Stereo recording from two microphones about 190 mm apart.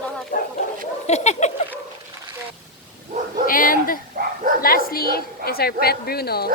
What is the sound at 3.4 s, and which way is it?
Speech, 45° left (ahead or behind).